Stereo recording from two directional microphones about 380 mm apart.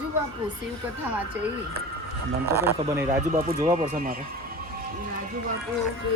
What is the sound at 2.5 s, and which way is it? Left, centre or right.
Speech, centre.